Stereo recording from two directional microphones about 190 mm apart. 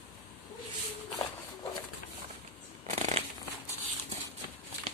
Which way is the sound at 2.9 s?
35° right (ahead or behind).